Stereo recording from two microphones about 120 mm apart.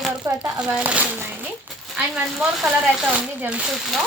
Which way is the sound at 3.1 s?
10° right (ahead or behind).